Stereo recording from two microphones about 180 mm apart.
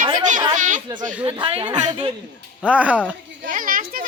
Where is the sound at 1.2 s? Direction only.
30° right (ahead or behind).